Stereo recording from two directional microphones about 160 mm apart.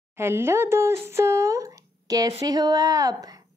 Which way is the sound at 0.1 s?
15° right (ahead or behind).